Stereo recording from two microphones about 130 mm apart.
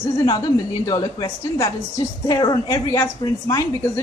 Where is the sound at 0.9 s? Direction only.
30° left (ahead or behind).